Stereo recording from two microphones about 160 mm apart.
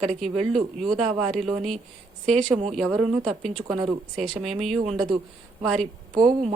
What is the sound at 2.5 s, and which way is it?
Speech, 45° right (ahead or behind).